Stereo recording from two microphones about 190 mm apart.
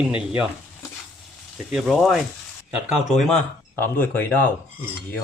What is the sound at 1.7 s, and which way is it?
Speech, centre (ahead or behind).